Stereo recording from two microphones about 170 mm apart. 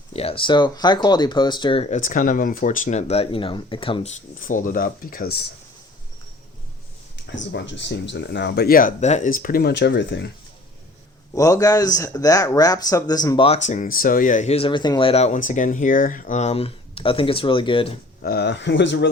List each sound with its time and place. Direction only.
0.1 s speech: 35° left (ahead or behind)
2.0 s speech: 50° left (ahead or behind); by 4.1 s 30° left (ahead or behind)
4.4 s speech: 50° left (ahead or behind)
7.3 s speech: 90° left
11.3 s speech: 20° left (ahead or behind)
13.6 s speech: 45° left (ahead or behind); by 17.9 s 30° left (ahead or behind)
18.2 s speech: 70° left (ahead or behind); by 19.0 s 90° left